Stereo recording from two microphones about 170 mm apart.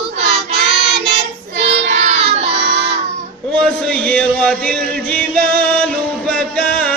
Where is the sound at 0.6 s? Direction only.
75° right (ahead or behind).